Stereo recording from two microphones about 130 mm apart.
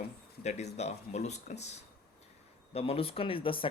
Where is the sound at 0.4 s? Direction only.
60° left (ahead or behind).